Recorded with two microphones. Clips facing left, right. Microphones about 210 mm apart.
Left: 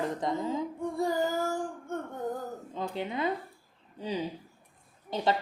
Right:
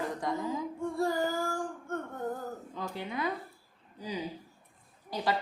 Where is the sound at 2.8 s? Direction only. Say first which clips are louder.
Left 4 dB; 20° left (ahead or behind).